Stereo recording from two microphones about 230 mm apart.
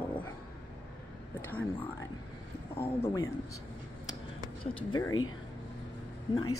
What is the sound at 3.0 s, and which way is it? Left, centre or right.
Speech, centre.